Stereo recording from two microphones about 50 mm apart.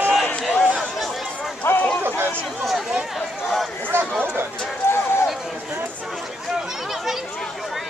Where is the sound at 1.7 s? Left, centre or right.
Left.